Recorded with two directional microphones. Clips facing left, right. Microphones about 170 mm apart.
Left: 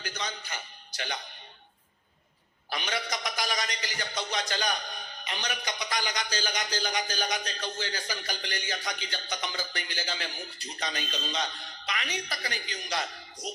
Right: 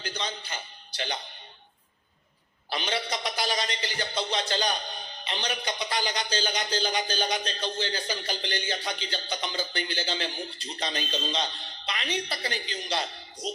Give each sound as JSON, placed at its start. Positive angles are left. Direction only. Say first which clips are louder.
{"t": 0.0, "sound": "a man's voice", "louder": "right 2 dB", "side_deg": -30}
{"t": 2.6, "sound": "a man's voice", "louder": "right 3 dB", "side_deg": -30}